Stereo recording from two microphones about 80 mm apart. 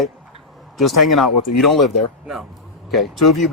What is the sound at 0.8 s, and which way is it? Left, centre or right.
Speech, centre.